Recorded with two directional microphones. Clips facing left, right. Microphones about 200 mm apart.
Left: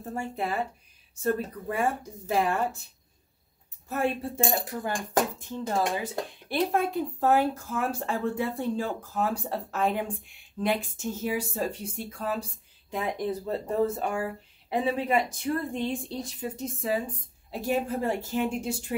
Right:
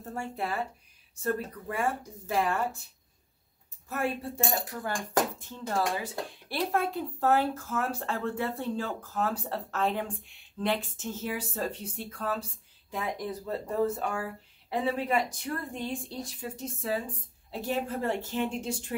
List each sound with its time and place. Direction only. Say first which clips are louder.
0.0 s speech: left 3 dB; 15° left (ahead or behind)
3.9 s speech: left 3 dB; 25° left (ahead or behind)
12.9 s speech: left 4 dB; 25° left (ahead or behind); by 18.9 s 10° left (ahead or behind)